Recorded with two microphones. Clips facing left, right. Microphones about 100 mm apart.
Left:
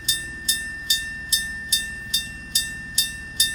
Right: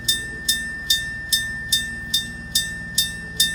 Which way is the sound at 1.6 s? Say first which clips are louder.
Right 3 dB; 50° left (ahead or behind).